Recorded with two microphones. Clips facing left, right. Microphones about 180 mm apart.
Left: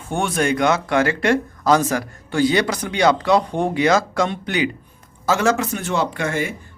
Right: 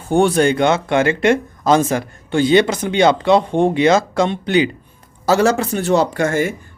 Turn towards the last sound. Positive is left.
turn(degrees=-45)  # may be behind; listen again after turning